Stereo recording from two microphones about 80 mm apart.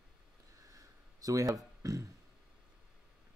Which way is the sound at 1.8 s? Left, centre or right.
Right.